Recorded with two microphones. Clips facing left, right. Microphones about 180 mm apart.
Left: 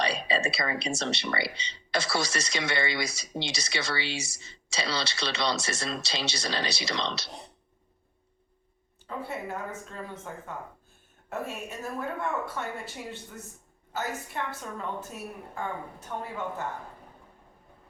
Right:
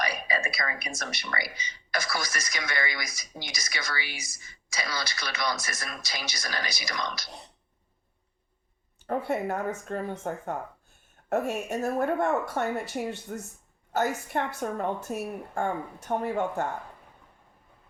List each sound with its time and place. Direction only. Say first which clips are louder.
0.0 s speech: left 2 dB; 30° left (ahead or behind)
9.0 s speech: right 7 dB; 45° right (ahead or behind)
11.7 s speech: right 11 dB; 45° right (ahead or behind)